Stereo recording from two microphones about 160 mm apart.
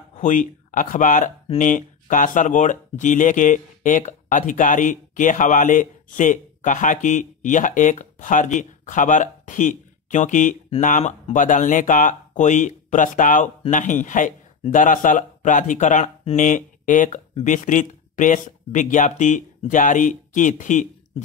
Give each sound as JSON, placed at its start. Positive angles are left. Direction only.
{"t": 0.2, "sound": "speech", "side_deg": 55}